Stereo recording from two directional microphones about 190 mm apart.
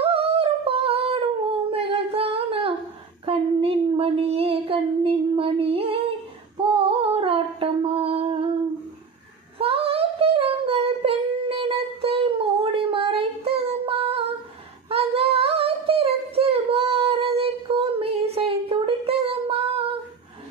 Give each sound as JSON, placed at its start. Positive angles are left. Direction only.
{"t": 0.0, "sound": "a sound", "side_deg": -30}
{"t": 3.3, "sound": "child singing", "side_deg": -30}
{"t": 6.6, "sound": "humming", "side_deg": -30}
{"t": 9.6, "sound": "singing", "side_deg": -30}
{"t": 14.9, "sound": "humming", "side_deg": -30}